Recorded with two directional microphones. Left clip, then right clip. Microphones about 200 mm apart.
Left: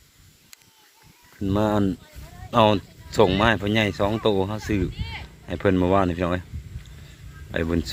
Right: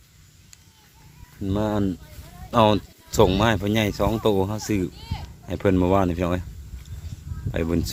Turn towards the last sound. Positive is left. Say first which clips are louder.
# even
turn(degrees=-10)  # may be behind; listen again after turning